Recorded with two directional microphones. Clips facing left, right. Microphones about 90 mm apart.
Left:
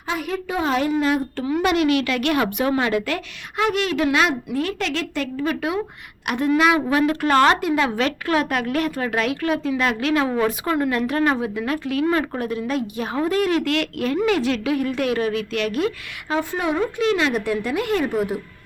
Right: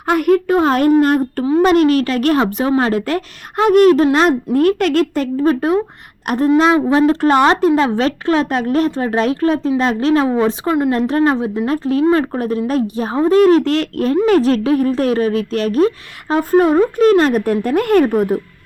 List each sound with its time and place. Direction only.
0.1 s a child's voice: 60° right (ahead or behind)
1.5 s a woman's voice: 35° right (ahead or behind)
6.5 s speech: 25° right (ahead or behind)
7.8 s a woman's voice: 30° right (ahead or behind)